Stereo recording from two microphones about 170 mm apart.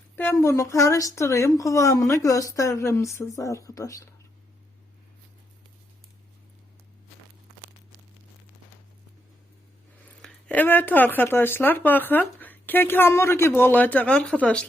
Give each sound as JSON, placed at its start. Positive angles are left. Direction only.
{"t": 0.2, "sound": "speech", "side_deg": 15}
{"t": 10.2, "sound": "speech", "side_deg": 5}